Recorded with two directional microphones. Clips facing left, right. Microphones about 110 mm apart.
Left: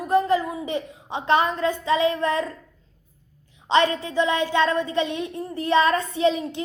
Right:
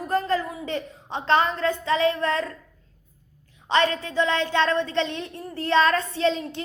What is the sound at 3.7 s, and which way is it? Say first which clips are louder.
A woman's voice: left 2 dB; 20° left (ahead or behind).